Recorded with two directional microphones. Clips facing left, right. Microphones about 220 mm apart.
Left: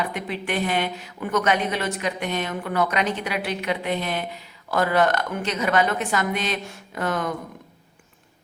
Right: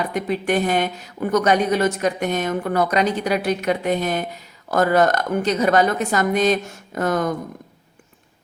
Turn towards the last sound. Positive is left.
turn(degrees=-40)  # may be behind; listen again after turning